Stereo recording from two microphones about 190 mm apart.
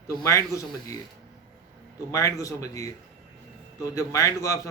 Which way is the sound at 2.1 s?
15° left (ahead or behind).